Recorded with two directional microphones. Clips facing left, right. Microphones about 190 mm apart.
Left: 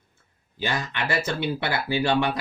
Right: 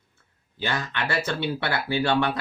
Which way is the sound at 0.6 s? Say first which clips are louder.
Even; 15° left (ahead or behind).